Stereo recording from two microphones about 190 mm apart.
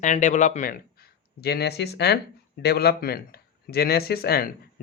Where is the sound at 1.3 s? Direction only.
55° left (ahead or behind).